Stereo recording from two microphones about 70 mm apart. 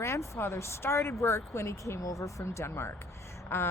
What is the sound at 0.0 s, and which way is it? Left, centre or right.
Speech, left.